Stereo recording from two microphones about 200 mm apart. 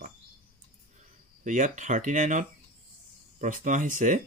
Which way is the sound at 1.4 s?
40° right (ahead or behind).